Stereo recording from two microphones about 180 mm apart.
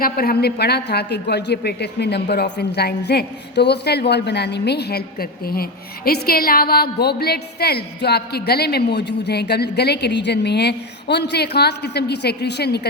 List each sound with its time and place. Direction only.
0.0 s a woman's voice: 60° left (ahead or behind)